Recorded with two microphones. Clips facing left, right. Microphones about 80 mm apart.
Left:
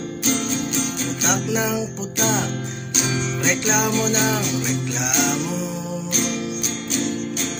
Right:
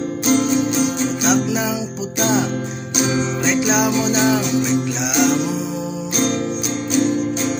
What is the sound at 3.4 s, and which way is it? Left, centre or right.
Music, centre.